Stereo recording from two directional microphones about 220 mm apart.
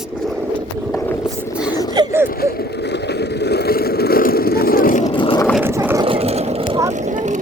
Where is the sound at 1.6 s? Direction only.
15° left (ahead or behind).